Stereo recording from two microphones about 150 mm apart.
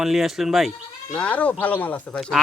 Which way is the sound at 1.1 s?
10° left (ahead or behind).